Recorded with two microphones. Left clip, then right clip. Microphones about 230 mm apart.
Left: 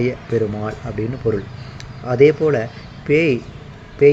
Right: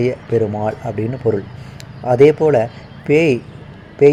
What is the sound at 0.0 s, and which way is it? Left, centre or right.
Speech, right.